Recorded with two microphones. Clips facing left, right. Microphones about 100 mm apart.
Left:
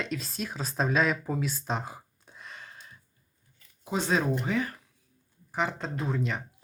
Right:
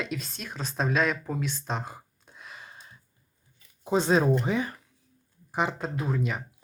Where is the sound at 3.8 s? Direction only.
30° right (ahead or behind).